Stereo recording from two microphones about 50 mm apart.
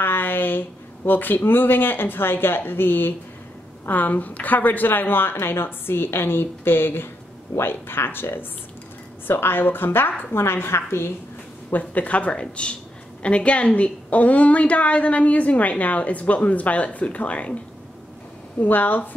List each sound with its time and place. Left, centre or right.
0.0 s a woman's voice: left
11.8 s a woman's voice: left
18.6 s a woman's voice: left